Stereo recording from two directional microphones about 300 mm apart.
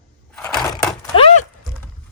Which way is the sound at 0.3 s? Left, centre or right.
Centre.